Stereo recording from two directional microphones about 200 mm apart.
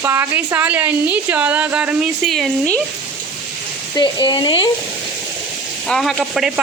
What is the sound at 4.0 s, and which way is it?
Speech, 25° left (ahead or behind).